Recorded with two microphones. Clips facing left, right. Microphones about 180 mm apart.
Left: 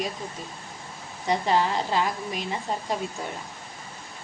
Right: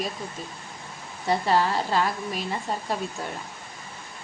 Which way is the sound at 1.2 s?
15° left (ahead or behind).